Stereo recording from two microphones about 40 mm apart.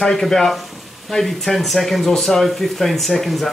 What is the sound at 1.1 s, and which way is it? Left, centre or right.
Speech, centre.